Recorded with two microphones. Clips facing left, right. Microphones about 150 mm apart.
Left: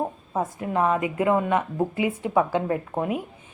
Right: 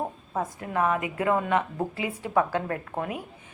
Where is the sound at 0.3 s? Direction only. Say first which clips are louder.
Left 3 dB; 20° left (ahead or behind).